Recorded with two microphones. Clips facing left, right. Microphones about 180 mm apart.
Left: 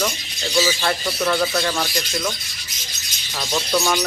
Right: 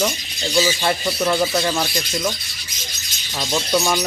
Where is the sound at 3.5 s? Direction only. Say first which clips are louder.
Right 1 dB; 10° right (ahead or behind).